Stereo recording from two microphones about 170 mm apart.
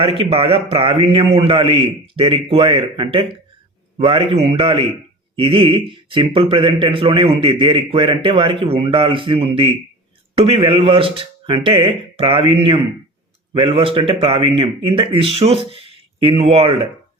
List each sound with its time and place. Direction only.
0.0 s a man's voice: 35° right (ahead or behind)